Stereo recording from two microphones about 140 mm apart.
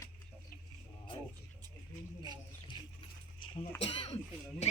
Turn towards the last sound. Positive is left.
turn(degrees=45)  # may be behind; listen again after turning